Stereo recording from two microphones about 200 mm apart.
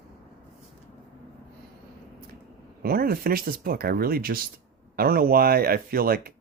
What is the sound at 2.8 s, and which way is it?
Speech, 50° right (ahead or behind).